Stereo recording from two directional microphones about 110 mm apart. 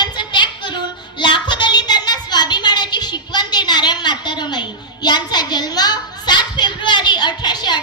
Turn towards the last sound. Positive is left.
turn(degrees=40)  # may be behind; listen again after turning